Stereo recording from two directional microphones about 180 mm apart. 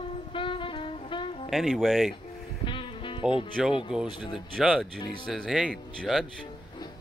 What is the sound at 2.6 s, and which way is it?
Music, 25° left (ahead or behind).